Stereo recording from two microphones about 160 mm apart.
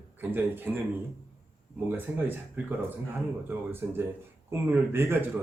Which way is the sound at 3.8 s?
15° right (ahead or behind).